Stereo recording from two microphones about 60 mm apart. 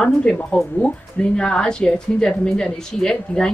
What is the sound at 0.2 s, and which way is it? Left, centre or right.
A woman's voice, centre.